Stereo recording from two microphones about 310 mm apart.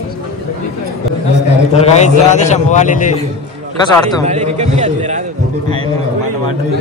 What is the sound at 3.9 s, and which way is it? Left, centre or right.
Speech, centre.